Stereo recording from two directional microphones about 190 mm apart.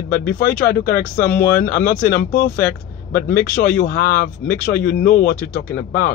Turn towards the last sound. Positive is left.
turn(degrees=50)  # may be behind; listen again after turning